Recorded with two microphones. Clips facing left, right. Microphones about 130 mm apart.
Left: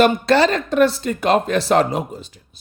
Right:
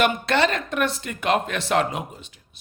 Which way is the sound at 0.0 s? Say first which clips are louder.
Left 6 dB; 35° left (ahead or behind).